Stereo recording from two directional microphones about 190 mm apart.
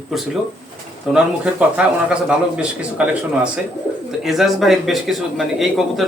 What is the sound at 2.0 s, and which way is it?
Speech, 5° right (ahead or behind).